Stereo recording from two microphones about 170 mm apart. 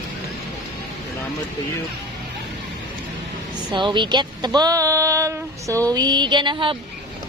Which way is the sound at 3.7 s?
30° right (ahead or behind).